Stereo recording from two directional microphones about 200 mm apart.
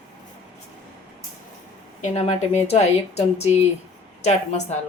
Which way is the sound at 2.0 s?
35° left (ahead or behind).